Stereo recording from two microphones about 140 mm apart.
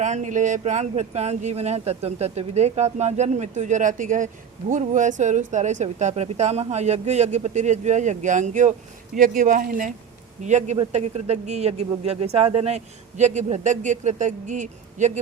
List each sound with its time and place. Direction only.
0.0 s speech: 60° right (ahead or behind)
9.1 s speech: 80° right
10.4 s speech: 55° right (ahead or behind)